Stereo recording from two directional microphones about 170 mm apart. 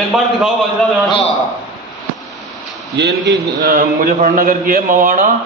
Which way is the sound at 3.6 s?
55° right (ahead or behind).